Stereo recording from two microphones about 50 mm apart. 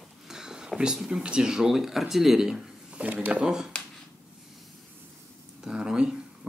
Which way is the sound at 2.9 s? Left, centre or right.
Right.